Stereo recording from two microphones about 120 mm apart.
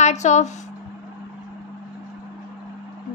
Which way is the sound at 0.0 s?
75° left (ahead or behind).